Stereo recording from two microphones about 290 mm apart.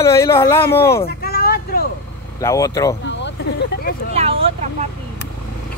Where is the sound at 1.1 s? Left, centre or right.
Left.